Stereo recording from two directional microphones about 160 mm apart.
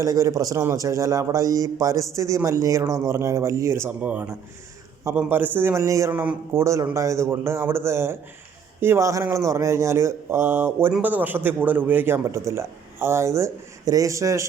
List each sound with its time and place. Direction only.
0.0 s a man's voice: 20° right (ahead or behind)